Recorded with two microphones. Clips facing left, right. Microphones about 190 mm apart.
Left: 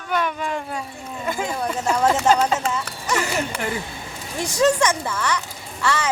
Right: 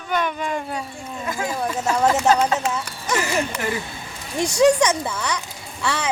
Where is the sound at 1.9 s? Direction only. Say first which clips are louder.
Even; 5° right (ahead or behind).